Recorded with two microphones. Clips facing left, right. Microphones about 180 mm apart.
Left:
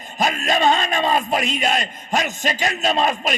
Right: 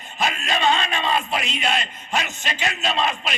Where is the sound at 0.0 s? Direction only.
40° left (ahead or behind).